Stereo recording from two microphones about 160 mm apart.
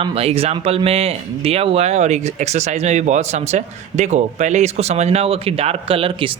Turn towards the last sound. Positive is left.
turn(degrees=-35)  # may be behind; listen again after turning